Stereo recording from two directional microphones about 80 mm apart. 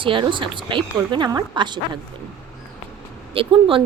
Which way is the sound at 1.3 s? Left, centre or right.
Right.